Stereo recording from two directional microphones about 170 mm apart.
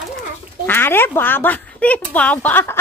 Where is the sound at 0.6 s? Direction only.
10° left (ahead or behind).